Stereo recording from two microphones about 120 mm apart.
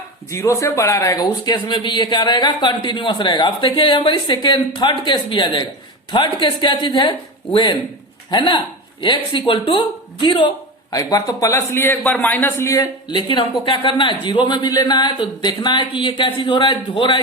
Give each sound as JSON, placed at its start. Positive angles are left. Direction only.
{"t": 0.3, "sound": "speech", "side_deg": 25}
{"t": 10.9, "sound": "a man's voice", "side_deg": 30}
{"t": 13.1, "sound": "speech", "side_deg": 40}